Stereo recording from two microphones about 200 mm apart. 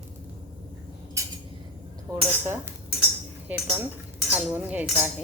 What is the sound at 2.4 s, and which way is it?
Speech, 10° right (ahead or behind).